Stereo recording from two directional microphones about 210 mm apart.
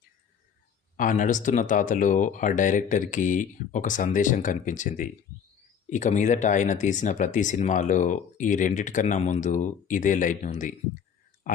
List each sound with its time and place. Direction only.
0.9 s speech: 40° left (ahead or behind)